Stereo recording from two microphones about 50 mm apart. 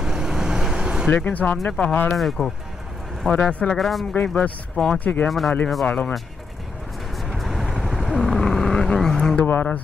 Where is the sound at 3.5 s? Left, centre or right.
Left.